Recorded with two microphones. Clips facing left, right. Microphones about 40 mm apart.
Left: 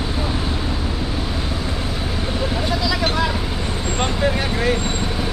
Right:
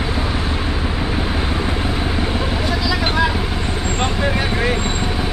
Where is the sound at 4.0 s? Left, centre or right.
Centre.